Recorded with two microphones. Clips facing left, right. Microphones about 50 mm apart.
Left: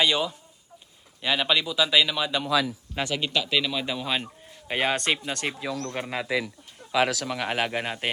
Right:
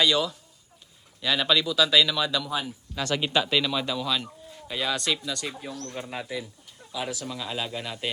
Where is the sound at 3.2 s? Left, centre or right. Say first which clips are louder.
Right 2 dB; centre.